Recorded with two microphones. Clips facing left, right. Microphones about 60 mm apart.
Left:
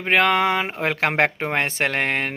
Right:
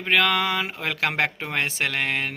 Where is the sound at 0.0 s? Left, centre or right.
Left.